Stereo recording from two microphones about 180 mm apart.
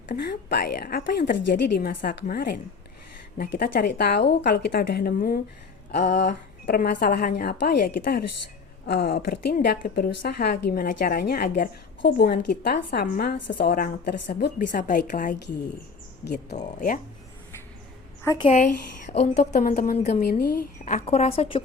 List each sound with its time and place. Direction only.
0.2 s a woman's voice: 65° left (ahead or behind)
4.4 s a woman's voice: 60° left (ahead or behind)
10.5 s a woman's voice: 50° left (ahead or behind)
16.2 s speech: 70° left (ahead or behind)
16.6 s a woman's voice: 50° left (ahead or behind)
18.4 s a woman's voice: 40° left (ahead or behind)
20.0 s speech: 40° left (ahead or behind)
20.4 s speech: 55° left (ahead or behind); by 21.6 s 30° left (ahead or behind)